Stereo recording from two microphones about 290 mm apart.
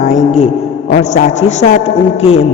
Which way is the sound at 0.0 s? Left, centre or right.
Left.